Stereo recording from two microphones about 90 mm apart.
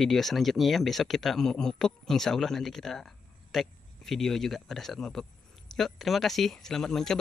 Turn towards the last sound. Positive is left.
turn(degrees=5)  # may be behind; listen again after turning